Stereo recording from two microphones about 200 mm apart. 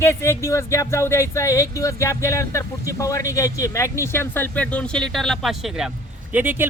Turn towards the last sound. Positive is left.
turn(degrees=-10)  # may be behind; listen again after turning